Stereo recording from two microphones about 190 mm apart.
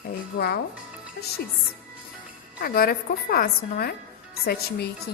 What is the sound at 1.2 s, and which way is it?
Speech, 70° left (ahead or behind).